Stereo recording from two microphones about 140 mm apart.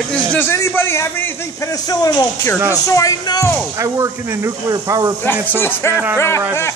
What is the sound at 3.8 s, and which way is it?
Speech, 20° right (ahead or behind).